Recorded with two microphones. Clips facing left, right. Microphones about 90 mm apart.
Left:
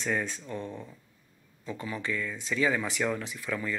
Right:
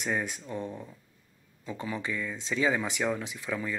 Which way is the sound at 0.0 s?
15° right (ahead or behind).